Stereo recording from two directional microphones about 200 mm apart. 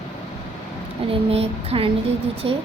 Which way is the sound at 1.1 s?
30° right (ahead or behind).